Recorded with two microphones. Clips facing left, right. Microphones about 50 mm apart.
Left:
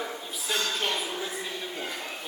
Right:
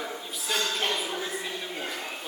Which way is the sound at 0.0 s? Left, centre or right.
Centre.